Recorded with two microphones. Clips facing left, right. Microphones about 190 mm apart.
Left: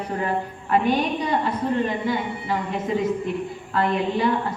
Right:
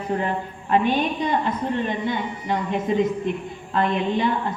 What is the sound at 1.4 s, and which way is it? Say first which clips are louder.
A woman's voice: left 1 dB; 20° right (ahead or behind).